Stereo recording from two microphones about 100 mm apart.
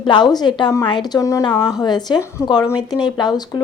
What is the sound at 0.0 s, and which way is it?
Speech, 50° left (ahead or behind).